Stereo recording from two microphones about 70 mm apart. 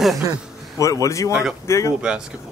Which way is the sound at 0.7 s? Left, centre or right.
Left.